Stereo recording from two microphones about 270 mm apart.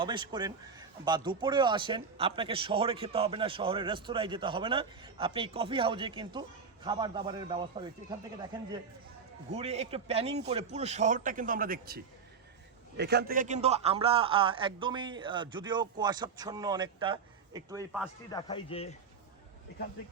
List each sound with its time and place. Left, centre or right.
0.0 s a man's voice: centre
9.5 s a man's voice: right
13.0 s a man's voice: right; by 17.8 s centre
18.3 s speech: centre